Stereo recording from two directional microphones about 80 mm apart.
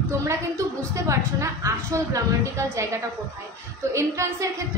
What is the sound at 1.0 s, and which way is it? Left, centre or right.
A woman's voice, right.